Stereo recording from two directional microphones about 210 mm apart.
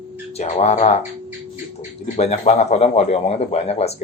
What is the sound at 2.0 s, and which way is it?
Speech, 30° left (ahead or behind).